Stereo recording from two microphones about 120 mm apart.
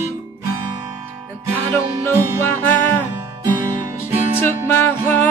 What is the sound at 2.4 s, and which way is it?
Music, 20° left (ahead or behind).